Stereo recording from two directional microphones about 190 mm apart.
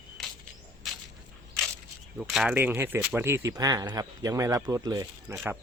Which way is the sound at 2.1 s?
5° right (ahead or behind).